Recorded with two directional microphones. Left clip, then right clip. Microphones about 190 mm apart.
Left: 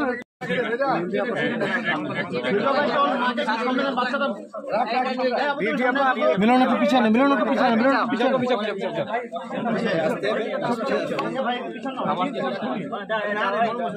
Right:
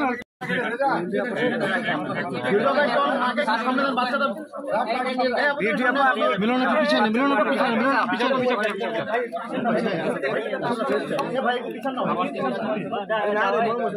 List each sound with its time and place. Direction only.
5.6 s a man's voice: 15° right (ahead or behind)
6.4 s a man's voice: 50° left (ahead or behind)